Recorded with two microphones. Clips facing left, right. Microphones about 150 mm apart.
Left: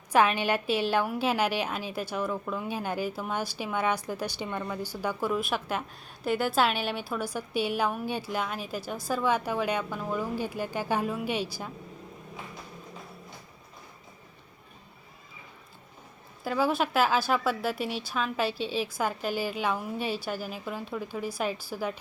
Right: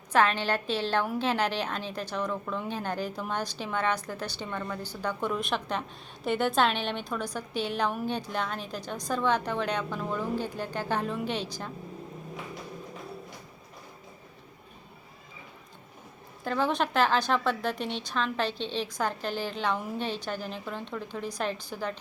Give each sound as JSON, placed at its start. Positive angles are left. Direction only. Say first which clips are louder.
{"t": 0.1, "sound": "a woman's voice", "louder": "left 1 dB", "side_deg": 10}
{"t": 16.4, "sound": "a woman's voice", "louder": "left 1 dB", "side_deg": 5}